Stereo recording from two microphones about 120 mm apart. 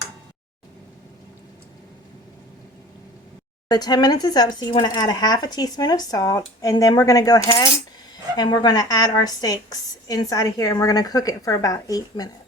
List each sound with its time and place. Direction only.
3.7 s speech: 35° left (ahead or behind)